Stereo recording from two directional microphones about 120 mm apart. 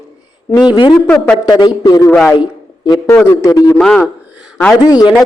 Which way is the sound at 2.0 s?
15° left (ahead or behind).